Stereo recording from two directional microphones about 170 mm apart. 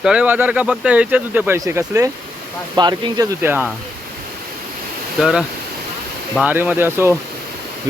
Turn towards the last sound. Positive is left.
turn(degrees=-15)  # may be behind; listen again after turning